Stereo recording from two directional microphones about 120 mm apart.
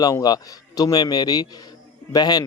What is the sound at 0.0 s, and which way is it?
A man's voice, 30° left (ahead or behind).